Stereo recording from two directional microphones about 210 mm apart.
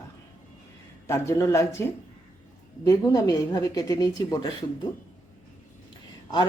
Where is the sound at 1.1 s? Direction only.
15° left (ahead or behind).